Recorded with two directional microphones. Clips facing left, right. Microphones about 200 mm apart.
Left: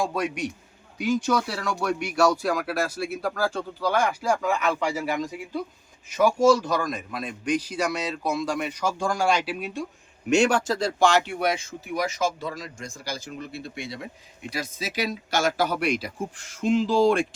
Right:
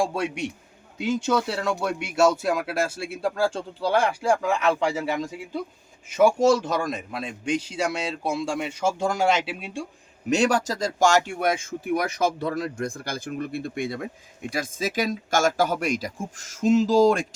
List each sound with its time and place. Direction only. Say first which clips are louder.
0.0 s speech: right 1 dB; 30° right (ahead or behind)
6.1 s speech: right 1 dB; 25° right (ahead or behind); by 17.2 s 40° right (ahead or behind)